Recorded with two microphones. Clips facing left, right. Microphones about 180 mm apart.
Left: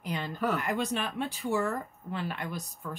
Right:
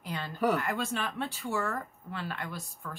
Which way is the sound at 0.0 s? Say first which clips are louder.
Left 3 dB; 20° left (ahead or behind).